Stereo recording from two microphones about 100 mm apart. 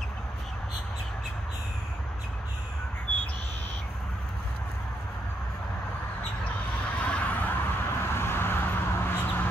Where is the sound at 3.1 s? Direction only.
15° left (ahead or behind).